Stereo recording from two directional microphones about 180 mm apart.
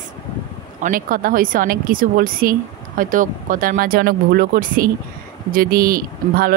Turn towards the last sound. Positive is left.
turn(degrees=-55)  # may be behind; listen again after turning